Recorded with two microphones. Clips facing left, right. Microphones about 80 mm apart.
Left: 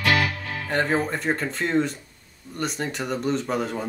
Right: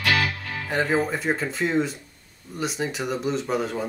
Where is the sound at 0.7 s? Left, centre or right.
Centre.